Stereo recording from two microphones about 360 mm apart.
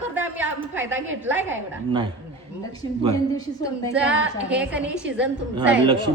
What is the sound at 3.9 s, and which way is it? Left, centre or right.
A woman's voice, centre.